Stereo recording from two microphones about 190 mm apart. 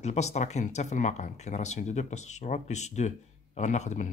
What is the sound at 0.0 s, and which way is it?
Speech, 35° left (ahead or behind).